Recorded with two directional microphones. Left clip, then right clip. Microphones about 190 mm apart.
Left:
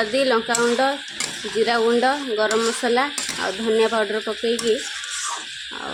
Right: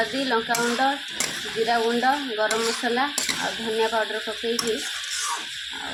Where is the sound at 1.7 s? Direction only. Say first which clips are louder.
Left 2 dB; 55° left (ahead or behind).